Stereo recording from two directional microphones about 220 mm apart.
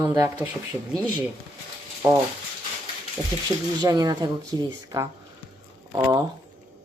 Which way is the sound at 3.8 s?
20° right (ahead or behind).